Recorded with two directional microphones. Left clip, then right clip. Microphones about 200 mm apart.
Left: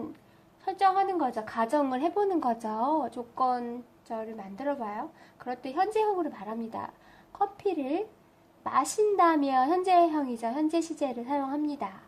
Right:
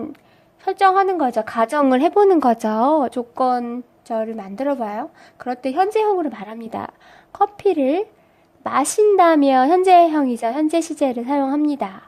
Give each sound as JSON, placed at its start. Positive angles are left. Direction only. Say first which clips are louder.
{"t": 0.6, "sound": "speech", "louder": "right 10 dB", "side_deg": -50}